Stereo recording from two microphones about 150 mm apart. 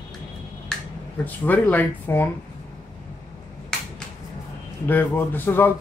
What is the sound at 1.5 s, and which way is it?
Speech, 10° left (ahead or behind).